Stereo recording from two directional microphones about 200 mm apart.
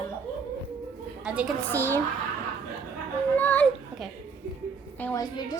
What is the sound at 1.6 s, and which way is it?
Speech, 10° left (ahead or behind).